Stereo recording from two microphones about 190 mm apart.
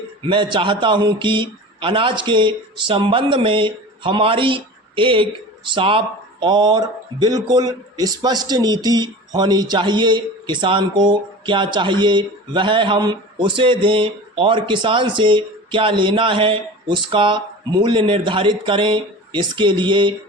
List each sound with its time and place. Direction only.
0.3 s a man's voice: 25° right (ahead or behind)